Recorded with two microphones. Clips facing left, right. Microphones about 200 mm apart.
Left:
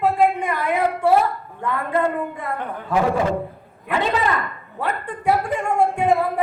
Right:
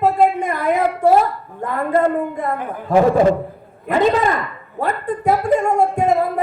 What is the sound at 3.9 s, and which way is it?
A woman's voice, 40° right (ahead or behind).